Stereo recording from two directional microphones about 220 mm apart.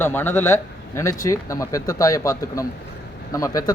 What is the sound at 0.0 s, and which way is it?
Speech, 10° left (ahead or behind).